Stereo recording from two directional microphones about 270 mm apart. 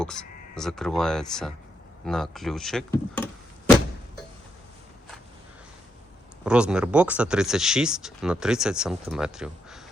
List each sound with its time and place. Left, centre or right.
0.0 s speech: centre
6.4 s speech: centre